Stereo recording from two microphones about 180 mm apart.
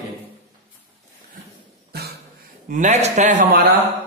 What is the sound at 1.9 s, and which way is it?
Cough, 60° right (ahead or behind).